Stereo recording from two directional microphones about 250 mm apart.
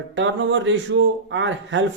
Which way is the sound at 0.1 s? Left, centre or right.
Right.